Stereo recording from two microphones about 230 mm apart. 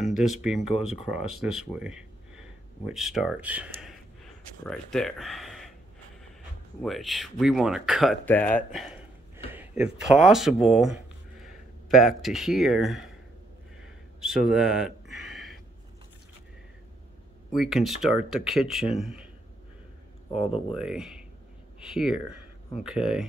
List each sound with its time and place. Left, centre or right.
0.0 s speech: centre
6.8 s speech: centre
14.2 s a sound: centre
17.5 s speech: centre
20.3 s speech: left
20.7 s speech: centre